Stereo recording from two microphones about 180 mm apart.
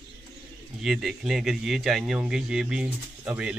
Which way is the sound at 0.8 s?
Centre (ahead or behind).